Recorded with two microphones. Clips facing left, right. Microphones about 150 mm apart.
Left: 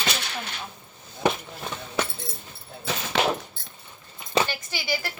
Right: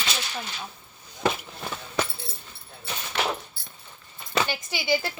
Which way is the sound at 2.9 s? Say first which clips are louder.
Left 6 dB; 90° left.